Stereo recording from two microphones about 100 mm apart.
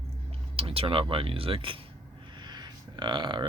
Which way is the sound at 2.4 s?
50° right (ahead or behind).